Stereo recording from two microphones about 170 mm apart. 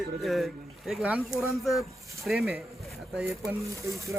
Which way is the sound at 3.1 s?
15° right (ahead or behind).